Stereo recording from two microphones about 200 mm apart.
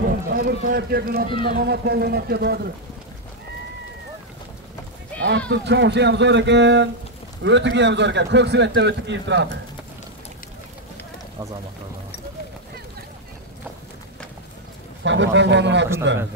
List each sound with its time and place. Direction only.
0.0 s speech: 50° right (ahead or behind)
5.5 s a man's voice: 60° right (ahead or behind)
15.0 s a man's voice: 65° right (ahead or behind)